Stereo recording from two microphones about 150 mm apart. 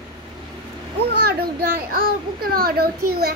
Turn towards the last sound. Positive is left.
turn(degrees=-90)